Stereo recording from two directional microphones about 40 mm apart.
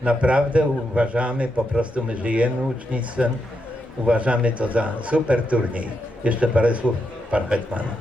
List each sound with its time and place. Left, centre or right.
0.0 s a man's voice: right